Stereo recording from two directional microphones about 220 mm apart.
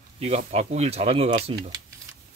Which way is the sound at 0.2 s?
30° right (ahead or behind).